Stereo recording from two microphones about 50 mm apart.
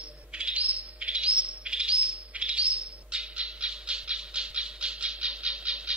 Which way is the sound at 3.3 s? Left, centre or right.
Centre.